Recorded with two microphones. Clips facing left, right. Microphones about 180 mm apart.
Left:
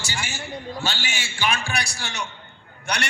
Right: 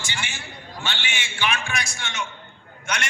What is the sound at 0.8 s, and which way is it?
A man's voice, 40° left (ahead or behind).